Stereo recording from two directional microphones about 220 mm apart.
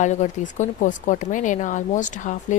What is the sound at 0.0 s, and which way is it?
Speech, 35° left (ahead or behind).